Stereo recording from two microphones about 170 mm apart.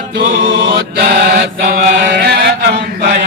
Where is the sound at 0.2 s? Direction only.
55° right (ahead or behind).